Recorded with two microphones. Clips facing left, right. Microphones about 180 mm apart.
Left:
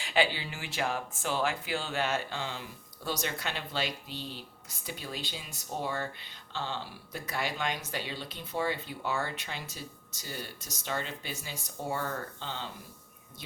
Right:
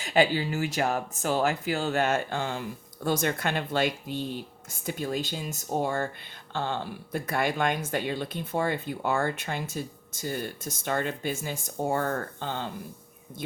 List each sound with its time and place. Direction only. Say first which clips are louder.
0.0 s speech: right 6 dB; 45° right (ahead or behind)